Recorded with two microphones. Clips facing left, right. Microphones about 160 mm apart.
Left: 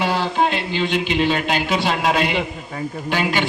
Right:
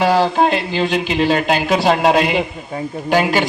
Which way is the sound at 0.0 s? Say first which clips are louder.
Right 6 dB; 40° right (ahead or behind).